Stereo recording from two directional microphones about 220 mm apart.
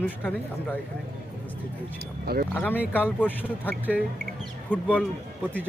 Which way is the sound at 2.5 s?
10° left (ahead or behind).